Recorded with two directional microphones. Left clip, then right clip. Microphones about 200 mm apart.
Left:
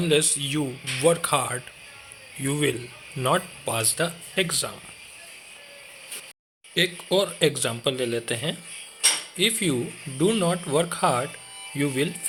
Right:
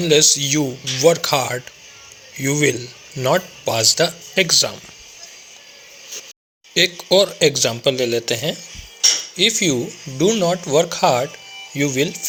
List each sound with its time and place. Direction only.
0.0 s speech: 20° right (ahead or behind)
6.7 s speech: 20° right (ahead or behind)